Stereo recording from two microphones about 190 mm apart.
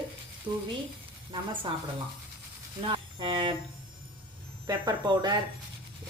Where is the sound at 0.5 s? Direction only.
25° right (ahead or behind).